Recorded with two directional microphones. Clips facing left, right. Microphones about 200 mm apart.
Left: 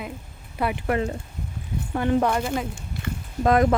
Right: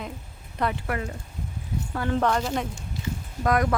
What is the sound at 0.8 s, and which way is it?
Speech, 25° left (ahead or behind).